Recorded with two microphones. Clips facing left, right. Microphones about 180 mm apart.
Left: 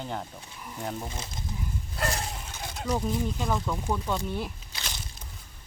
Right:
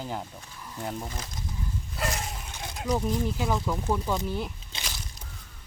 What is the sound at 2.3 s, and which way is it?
Speech, centre (ahead or behind).